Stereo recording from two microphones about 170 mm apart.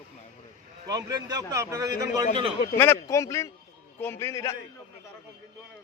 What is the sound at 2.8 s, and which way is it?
Speech, 15° left (ahead or behind).